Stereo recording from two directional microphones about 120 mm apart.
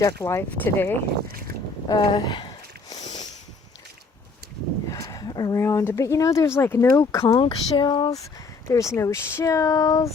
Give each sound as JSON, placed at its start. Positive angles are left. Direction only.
{"t": 0.0, "sound": "speech", "side_deg": 25}
{"t": 1.9, "sound": "speech", "side_deg": 35}
{"t": 4.9, "sound": "a sound", "side_deg": 30}
{"t": 5.5, "sound": "speech", "side_deg": 25}
{"t": 7.3, "sound": "speech", "side_deg": 40}
{"t": 8.2, "sound": "speech", "side_deg": 25}